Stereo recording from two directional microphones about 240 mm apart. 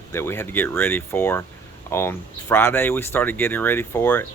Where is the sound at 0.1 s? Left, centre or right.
Centre.